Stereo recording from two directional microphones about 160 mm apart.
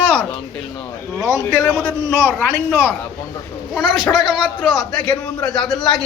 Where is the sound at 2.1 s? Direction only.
15° right (ahead or behind).